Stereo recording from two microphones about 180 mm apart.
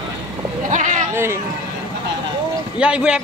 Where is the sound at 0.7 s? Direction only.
45° right (ahead or behind).